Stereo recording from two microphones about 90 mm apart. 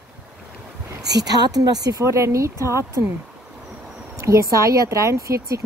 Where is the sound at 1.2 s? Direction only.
45° right (ahead or behind).